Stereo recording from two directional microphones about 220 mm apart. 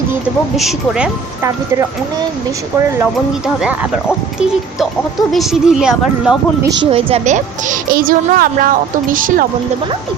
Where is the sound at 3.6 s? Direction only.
5° right (ahead or behind).